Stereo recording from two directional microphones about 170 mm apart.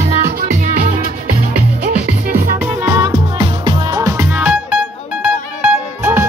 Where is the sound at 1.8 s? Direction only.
60° right (ahead or behind).